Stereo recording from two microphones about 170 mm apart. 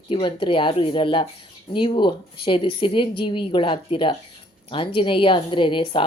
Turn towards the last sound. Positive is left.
turn(degrees=30)  # may be behind; listen again after turning